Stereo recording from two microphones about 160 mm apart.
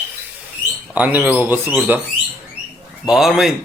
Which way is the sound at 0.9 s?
10° right (ahead or behind).